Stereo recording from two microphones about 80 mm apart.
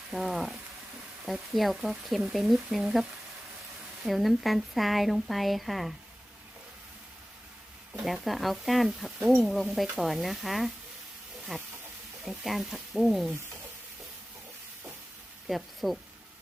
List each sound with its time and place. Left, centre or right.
0.1 s speech: centre
8.0 s speech: centre
11.5 s hiss: centre
12.2 s speech: centre
15.4 s speech: centre